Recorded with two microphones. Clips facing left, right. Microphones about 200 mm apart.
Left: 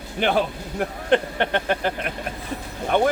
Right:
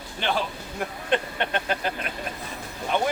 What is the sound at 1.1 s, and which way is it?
Speech, 60° left (ahead or behind).